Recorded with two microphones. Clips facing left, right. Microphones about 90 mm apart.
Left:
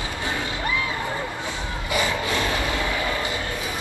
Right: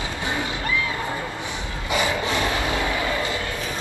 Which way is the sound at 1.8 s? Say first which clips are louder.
Right 2 dB; 20° right (ahead or behind).